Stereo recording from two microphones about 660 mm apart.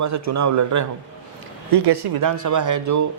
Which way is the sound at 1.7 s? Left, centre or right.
Right.